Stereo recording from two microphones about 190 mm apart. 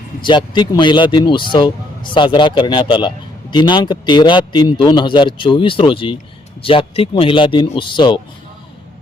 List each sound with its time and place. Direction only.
0.2 s a man's voice: 25° left (ahead or behind)